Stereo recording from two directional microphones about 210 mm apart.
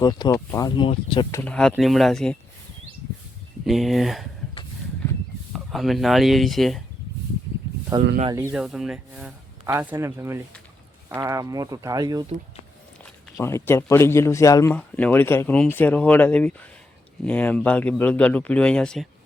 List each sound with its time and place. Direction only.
0.0 s speech: 20° left (ahead or behind)
1.5 s speech: 5° left (ahead or behind)
3.7 s speech: centre (ahead or behind)
5.5 s speech: centre (ahead or behind)
7.9 s speech: 15° right (ahead or behind)
13.3 s speech: 15° left (ahead or behind)